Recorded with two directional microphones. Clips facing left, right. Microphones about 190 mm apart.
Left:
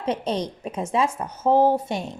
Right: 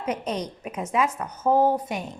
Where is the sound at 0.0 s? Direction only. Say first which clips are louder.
Left 3 dB; 30° left (ahead or behind).